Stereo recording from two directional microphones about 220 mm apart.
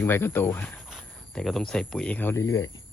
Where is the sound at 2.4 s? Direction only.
65° left (ahead or behind).